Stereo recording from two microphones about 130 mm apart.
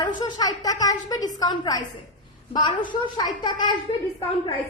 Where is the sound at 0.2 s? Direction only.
30° left (ahead or behind).